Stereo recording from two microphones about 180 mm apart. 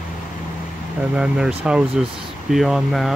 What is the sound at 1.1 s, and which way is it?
Speech, 5° right (ahead or behind).